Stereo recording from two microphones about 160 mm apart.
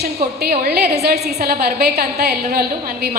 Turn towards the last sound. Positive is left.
turn(degrees=-75)  # may be behind; listen again after turning